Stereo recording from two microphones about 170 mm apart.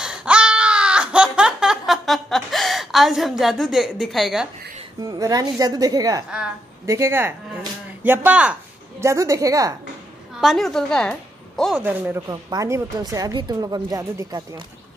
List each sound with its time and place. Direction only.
0.0 s baby cry: 5° right (ahead or behind)
5.0 s speech: 20° right (ahead or behind)
9.0 s speech: 20° right (ahead or behind)
10.4 s a woman's voice: centre (ahead or behind)
11.8 s speech: 10° right (ahead or behind)
12.3 s speech: 20° right (ahead or behind)